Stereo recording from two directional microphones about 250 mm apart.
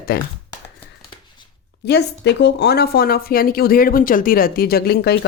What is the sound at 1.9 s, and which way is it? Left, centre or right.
Speech, left.